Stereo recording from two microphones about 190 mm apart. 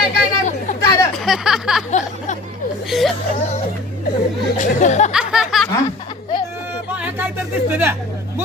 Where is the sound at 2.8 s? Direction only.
Centre (ahead or behind).